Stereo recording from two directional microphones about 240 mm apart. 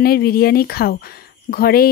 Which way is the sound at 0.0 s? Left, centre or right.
Left.